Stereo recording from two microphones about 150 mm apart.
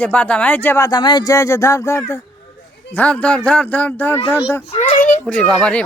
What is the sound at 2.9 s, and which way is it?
Speech, 10° left (ahead or behind).